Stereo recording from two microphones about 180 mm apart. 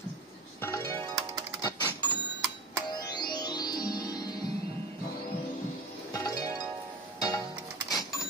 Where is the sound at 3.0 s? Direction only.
25° left (ahead or behind).